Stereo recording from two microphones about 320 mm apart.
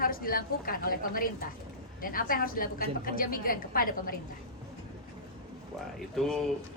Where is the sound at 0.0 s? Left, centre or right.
Left.